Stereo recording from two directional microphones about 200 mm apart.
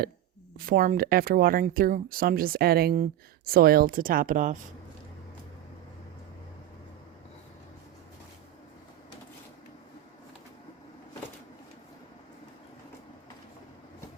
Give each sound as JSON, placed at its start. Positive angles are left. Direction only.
{"t": 0.6, "sound": "speech", "side_deg": -45}